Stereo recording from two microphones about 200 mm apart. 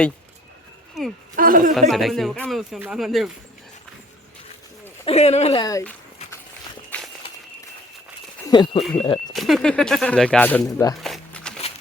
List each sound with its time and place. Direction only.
1.4 s speech: 45° right (ahead or behind)
1.9 s speech: centre (ahead or behind)
5.0 s speech: 30° left (ahead or behind)
5.6 s speech: 15° left (ahead or behind)
6.9 s walk: 10° left (ahead or behind)
8.4 s speech: 20° left (ahead or behind)
9.3 s speech: centre (ahead or behind)
11.0 s shuffling cards: 5° left (ahead or behind)